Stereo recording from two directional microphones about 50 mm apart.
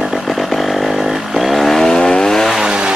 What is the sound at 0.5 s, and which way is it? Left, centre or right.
Chainsaw, centre.